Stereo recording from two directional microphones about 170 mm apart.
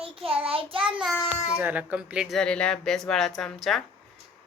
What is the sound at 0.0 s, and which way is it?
Child singing, 30° right (ahead or behind).